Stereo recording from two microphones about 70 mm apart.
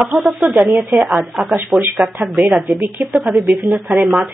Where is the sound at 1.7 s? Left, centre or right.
Right.